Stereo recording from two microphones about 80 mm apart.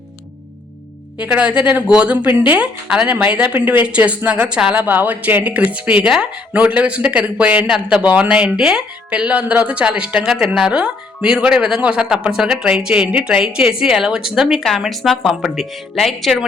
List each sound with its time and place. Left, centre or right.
1.2 s speech: centre
2.5 s speech: centre
3.2 s speech: centre
7.7 s speech: centre
8.0 s speech: centre